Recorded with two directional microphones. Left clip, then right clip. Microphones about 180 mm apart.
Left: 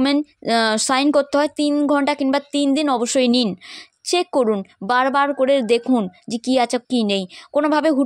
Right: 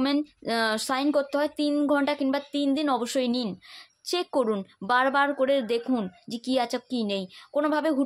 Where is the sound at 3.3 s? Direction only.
50° left (ahead or behind).